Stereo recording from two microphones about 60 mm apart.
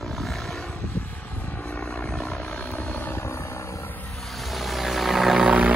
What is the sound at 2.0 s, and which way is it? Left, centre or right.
Vehicle, centre.